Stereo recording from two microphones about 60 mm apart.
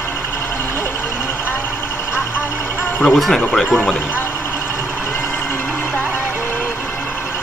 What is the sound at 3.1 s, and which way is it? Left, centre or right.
Speech, centre.